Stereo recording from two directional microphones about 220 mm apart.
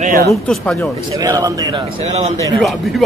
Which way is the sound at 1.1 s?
15° right (ahead or behind).